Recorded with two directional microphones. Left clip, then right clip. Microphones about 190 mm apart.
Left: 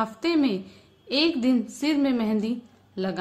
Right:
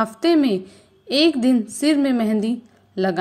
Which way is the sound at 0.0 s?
30° right (ahead or behind).